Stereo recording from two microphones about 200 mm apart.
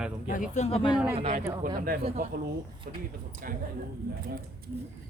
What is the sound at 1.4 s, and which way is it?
Speech, 15° right (ahead or behind).